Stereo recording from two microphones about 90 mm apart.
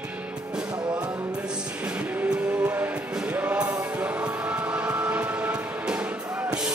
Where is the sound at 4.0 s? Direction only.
15° right (ahead or behind).